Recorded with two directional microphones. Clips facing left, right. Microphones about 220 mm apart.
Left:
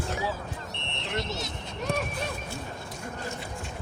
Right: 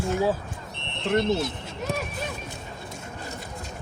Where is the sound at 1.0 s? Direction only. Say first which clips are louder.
Right 11 dB; 50° right (ahead or behind).